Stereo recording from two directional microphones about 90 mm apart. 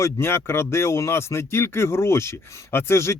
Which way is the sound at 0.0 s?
30° left (ahead or behind).